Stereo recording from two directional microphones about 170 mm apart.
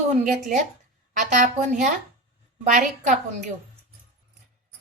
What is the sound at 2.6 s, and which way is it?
Speech, 45° right (ahead or behind).